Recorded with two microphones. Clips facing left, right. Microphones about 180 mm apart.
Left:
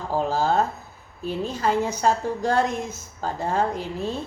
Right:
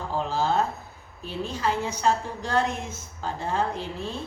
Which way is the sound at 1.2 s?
45° left (ahead or behind).